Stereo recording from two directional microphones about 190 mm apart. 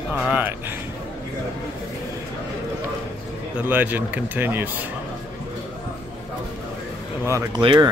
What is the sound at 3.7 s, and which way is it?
Speech, 10° right (ahead or behind).